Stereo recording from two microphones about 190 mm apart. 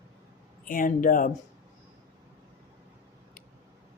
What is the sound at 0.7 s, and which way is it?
Speech, 45° left (ahead or behind).